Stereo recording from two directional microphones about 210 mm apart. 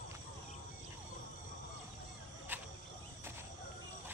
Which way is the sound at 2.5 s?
10° right (ahead or behind).